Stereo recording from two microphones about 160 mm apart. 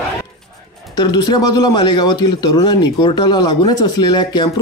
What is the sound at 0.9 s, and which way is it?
A man's voice, 25° left (ahead or behind).